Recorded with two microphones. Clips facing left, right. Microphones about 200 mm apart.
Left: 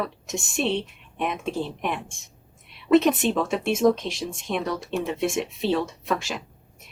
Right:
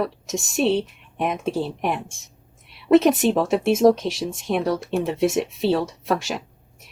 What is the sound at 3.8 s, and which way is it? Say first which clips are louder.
Speech: right 2 dB; 45° right (ahead or behind).